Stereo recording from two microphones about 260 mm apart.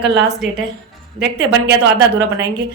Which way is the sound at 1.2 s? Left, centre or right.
Right.